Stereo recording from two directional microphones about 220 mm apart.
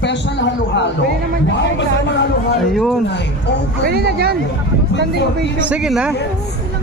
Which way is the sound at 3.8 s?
45° right (ahead or behind).